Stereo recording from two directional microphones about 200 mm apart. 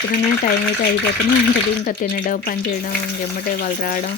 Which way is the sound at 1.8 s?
45° left (ahead or behind).